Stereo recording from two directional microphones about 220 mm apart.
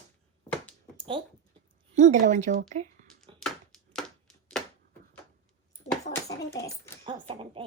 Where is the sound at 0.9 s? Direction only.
20° right (ahead or behind).